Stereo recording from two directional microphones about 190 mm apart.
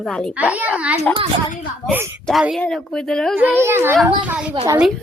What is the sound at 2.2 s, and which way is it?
Speech, centre (ahead or behind).